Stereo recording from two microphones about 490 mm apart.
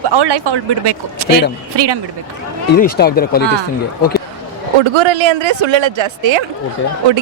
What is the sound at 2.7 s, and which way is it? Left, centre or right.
Speech, centre.